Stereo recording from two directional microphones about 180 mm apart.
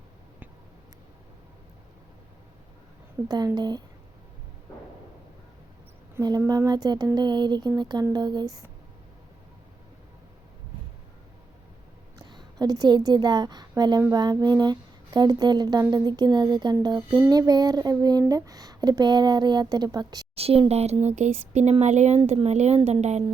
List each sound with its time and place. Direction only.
3.2 s speech: 25° right (ahead or behind)
6.1 s speech: 20° right (ahead or behind)
12.2 s a woman's voice: 25° right (ahead or behind)
20.3 s speech: 35° right (ahead or behind)